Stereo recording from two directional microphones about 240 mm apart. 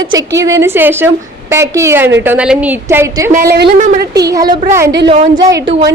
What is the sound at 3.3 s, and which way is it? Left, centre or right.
Speech, right.